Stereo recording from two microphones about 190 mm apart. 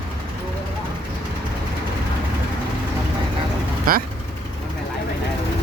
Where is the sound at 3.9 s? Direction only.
50° right (ahead or behind).